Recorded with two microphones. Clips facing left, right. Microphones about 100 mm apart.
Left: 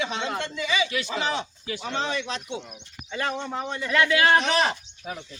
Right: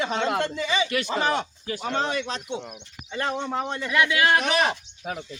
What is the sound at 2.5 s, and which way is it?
Speech, 20° right (ahead or behind).